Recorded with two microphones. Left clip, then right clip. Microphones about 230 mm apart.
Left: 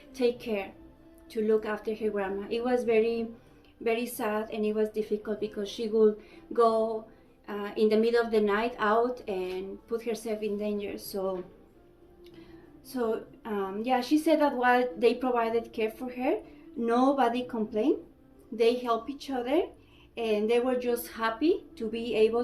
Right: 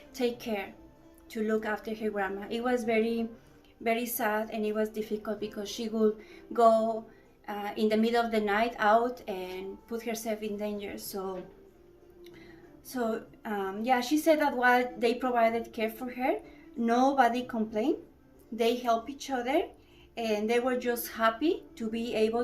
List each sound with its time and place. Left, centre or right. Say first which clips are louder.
0.1 s a woman's voice: left 3 dB; centre
12.9 s a woman's voice: left 2 dB; centre